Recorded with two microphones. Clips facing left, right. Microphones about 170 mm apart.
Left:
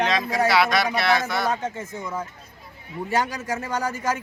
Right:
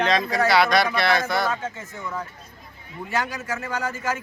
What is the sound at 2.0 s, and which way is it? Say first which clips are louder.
Speech: even; 20° left (ahead or behind).